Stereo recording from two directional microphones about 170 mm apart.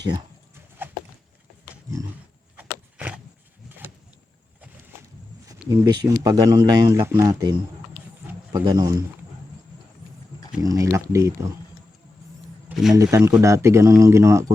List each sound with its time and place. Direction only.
0.8 s a sound: 10° right (ahead or behind)
1.7 s roaring cats: 15° right (ahead or behind)
5.5 s speech: 25° right (ahead or behind)
8.5 s speech: 20° right (ahead or behind)
10.6 s speech: 20° right (ahead or behind)
12.6 s a sound: 5° right (ahead or behind)
13.0 s speech: 20° right (ahead or behind)